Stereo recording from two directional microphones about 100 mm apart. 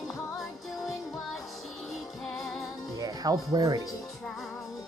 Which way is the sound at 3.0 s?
40° right (ahead or behind).